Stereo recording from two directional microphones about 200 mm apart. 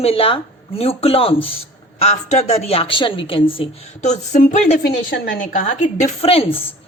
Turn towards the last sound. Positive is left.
turn(degrees=30)  # may be behind; listen again after turning